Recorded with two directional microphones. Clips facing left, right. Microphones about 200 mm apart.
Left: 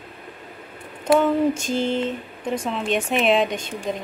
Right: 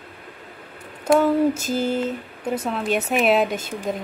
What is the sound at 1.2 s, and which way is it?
Speech, 5° right (ahead or behind).